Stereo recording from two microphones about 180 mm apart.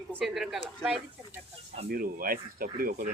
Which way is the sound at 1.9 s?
55° right (ahead or behind).